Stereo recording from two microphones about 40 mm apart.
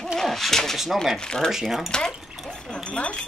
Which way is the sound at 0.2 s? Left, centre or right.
Centre.